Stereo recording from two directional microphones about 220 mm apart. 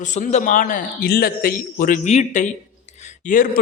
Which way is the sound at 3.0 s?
35° left (ahead or behind).